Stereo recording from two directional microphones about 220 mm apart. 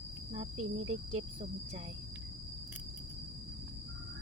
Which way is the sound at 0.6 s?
25° right (ahead or behind).